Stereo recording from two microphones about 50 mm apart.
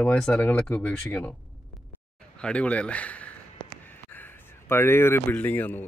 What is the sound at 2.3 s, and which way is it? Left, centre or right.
Speech, left.